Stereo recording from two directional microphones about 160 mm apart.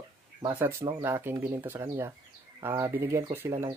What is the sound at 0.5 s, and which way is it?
Speech, 15° right (ahead or behind).